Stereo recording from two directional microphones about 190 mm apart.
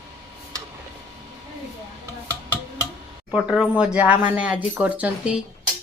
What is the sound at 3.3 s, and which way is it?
Speech, 5° right (ahead or behind).